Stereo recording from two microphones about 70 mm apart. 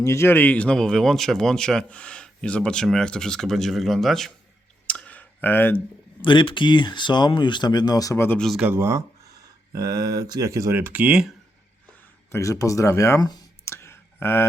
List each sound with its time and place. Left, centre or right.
0.0 s speech: left
0.3 s speech: left
0.8 s speech: centre
4.9 s clicking: centre
6.2 s speech: left
8.1 s speech: left
8.7 s speech: right
9.7 s speech: right
10.5 s speech: right
10.8 s speech: right
12.3 s speech: left
13.2 s speech: left
13.7 s a sound: left